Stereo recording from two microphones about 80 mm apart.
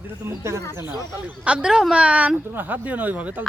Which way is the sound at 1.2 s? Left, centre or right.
Centre.